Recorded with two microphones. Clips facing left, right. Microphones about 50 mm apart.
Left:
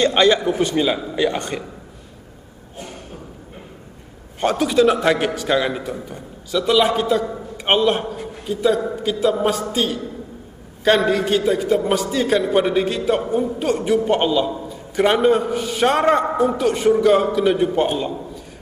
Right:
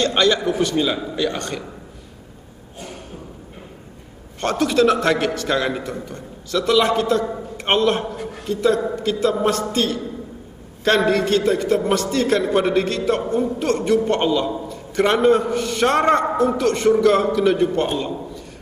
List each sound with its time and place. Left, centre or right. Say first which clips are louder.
0.0 s a man's voice: left 2 dB; centre
4.4 s a man's voice: left 1 dB; centre
11.1 s a man's voice: even; centre